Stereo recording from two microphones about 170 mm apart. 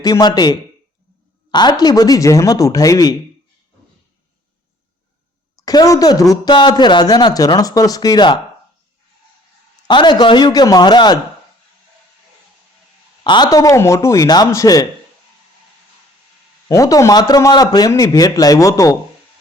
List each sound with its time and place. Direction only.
0.0 s a woman's voice: 25° left (ahead or behind)
5.5 s a woman's voice: 20° left (ahead or behind)
9.8 s a woman's voice: 25° left (ahead or behind)
13.2 s a woman's voice: 25° left (ahead or behind)
16.6 s a woman's voice: 20° left (ahead or behind)